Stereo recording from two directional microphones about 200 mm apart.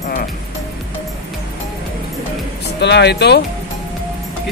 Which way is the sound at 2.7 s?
60° left (ahead or behind).